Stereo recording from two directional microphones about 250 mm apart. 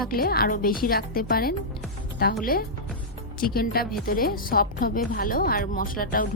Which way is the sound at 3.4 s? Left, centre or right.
Left.